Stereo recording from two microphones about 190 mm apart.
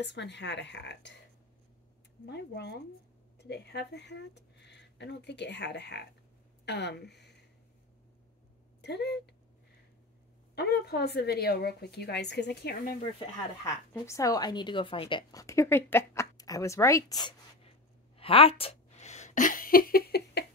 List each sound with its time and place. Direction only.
0.0 s speech: 65° left (ahead or behind)
2.2 s a woman's voice: 60° left (ahead or behind)
8.8 s a woman's voice: 60° left (ahead or behind)
10.5 s a woman's voice: 60° left (ahead or behind)
13.7 s a woman's voice: 15° left (ahead or behind)
17.6 s a sound: 30° left (ahead or behind); by 20.4 s 60° left (ahead or behind)